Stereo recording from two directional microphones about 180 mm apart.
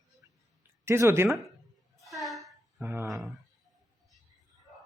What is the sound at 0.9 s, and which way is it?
Speech, 15° right (ahead or behind).